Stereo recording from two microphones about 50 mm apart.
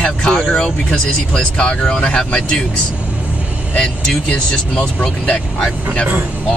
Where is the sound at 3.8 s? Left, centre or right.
Centre.